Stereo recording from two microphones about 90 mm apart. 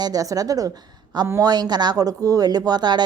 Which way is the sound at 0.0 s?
40° right (ahead or behind).